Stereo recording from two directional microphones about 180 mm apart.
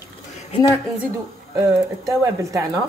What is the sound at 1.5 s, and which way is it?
Speech, 20° right (ahead or behind).